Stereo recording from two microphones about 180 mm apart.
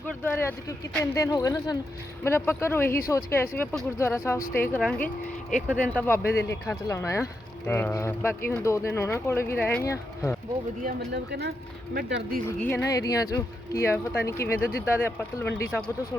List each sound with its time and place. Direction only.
0.3 s a man's voice: 15° left (ahead or behind)
10.8 s speech: 65° right (ahead or behind)
12.5 s speech: 10° left (ahead or behind)